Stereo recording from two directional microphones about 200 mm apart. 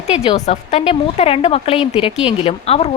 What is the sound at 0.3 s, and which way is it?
A woman's voice, 35° left (ahead or behind).